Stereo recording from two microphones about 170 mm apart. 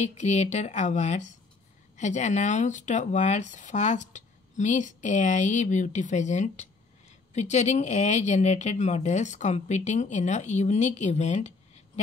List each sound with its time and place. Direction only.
0.0 s speech: 40° left (ahead or behind)